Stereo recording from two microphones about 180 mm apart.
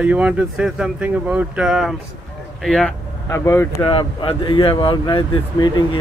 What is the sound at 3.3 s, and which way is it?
Speech, 15° left (ahead or behind).